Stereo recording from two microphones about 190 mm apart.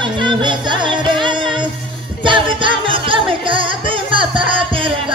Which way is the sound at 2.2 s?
25° right (ahead or behind).